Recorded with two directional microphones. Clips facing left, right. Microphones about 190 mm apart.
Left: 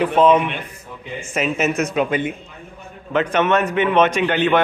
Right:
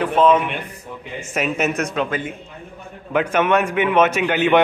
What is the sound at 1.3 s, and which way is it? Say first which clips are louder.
Speech: left 1 dB; centre (ahead or behind).